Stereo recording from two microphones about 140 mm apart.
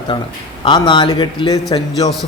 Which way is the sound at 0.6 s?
35° left (ahead or behind).